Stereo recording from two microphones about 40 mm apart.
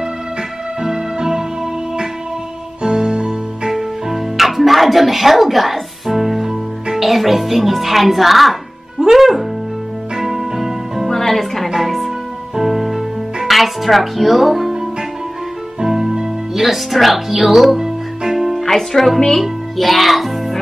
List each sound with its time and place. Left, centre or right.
0.8 s music: centre
2.8 s music: centre
3.7 s music: centre
6.9 s a child's voice: centre
10.1 s music: centre
11.1 s music: centre
15.8 s music: centre
18.6 s speech: centre
19.4 s a child's voice: centre